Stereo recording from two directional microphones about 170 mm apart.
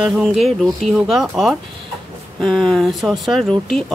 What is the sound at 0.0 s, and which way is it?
Speech, centre (ahead or behind).